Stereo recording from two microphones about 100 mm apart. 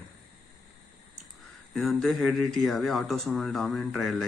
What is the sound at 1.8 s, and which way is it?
Speech, centre (ahead or behind).